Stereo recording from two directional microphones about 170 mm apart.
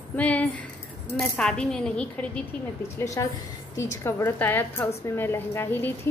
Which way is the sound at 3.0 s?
20° left (ahead or behind).